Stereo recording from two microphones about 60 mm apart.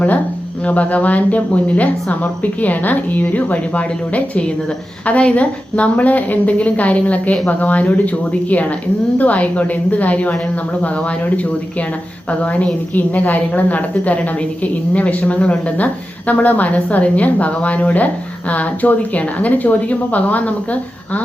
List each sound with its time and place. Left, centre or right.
0.6 s a woman's voice: left
12.3 s a woman's voice: left